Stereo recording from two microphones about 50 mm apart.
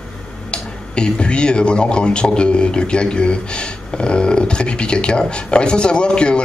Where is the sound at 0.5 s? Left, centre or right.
Centre.